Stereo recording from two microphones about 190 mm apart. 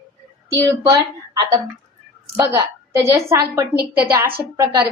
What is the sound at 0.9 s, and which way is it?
A woman's voice, 20° right (ahead or behind).